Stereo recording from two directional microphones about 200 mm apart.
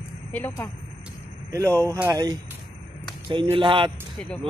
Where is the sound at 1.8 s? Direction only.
10° right (ahead or behind).